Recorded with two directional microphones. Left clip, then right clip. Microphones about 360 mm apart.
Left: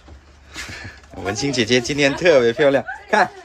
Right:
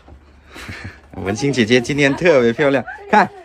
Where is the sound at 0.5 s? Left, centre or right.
Right.